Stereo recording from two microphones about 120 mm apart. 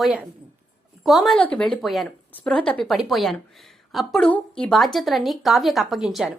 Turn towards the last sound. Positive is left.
turn(degrees=-5)  # may be behind; listen again after turning